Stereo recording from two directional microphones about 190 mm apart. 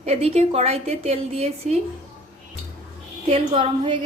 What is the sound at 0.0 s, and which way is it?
A woman's voice, 35° right (ahead or behind).